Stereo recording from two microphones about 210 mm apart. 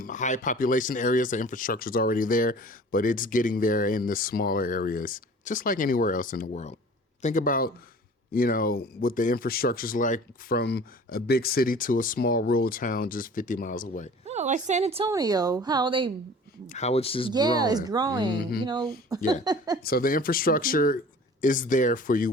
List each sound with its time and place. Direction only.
0.0 s speech: 35° left (ahead or behind)
14.3 s a woman's voice: 35° right (ahead or behind)
15.1 s speech: 20° right (ahead or behind)
16.6 s speech: 30° left (ahead or behind)
17.3 s speech: 20° right (ahead or behind)
18.3 s speech: 45° left (ahead or behind)
18.6 s speech: 20° right (ahead or behind)
19.8 s speech: 45° left (ahead or behind)